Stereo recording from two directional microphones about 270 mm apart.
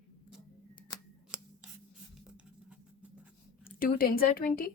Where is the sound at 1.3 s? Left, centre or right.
Centre.